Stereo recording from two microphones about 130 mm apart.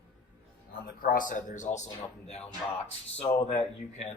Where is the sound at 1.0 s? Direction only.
90° left; by 4.0 s 55° left (ahead or behind).